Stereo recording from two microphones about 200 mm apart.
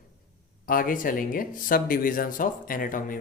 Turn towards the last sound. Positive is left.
turn(degrees=45)  # may be behind; listen again after turning